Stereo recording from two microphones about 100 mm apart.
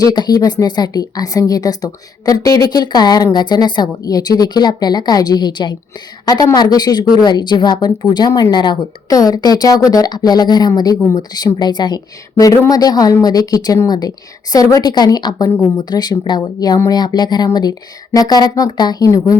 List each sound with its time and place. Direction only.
0.0 s a woman's voice: 40° left (ahead or behind)